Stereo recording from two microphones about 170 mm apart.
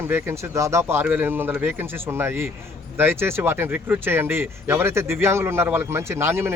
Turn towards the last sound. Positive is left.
turn(degrees=-15)  # may be behind; listen again after turning